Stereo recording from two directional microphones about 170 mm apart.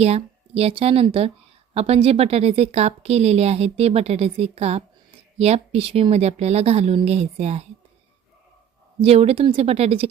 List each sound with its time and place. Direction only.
0.0 s a woman's voice: 35° right (ahead or behind)
9.0 s a woman's voice: 35° right (ahead or behind)